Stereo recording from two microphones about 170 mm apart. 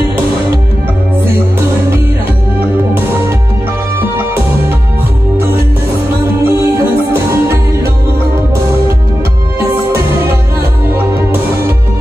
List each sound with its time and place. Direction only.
6.4 s music: 15° right (ahead or behind)